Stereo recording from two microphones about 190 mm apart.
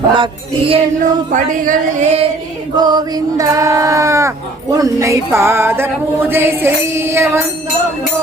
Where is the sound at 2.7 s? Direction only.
20° right (ahead or behind).